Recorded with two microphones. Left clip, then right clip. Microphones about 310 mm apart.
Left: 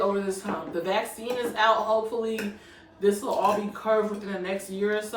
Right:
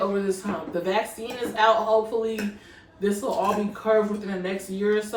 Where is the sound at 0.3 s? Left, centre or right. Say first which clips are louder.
Right 3 dB; centre.